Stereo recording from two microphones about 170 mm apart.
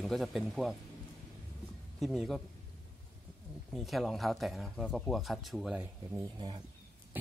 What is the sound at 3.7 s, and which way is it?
Speech, centre (ahead or behind).